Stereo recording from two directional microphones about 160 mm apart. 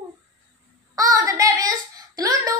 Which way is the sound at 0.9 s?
20° right (ahead or behind).